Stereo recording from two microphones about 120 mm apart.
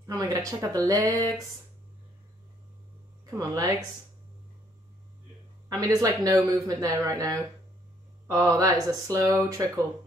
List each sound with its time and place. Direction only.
0.0 s speech: 30° right (ahead or behind)
3.3 s speech: 30° right (ahead or behind)
5.7 s speech: 30° right (ahead or behind)